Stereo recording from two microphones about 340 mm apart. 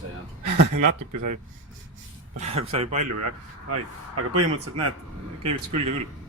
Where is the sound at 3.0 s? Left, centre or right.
Right.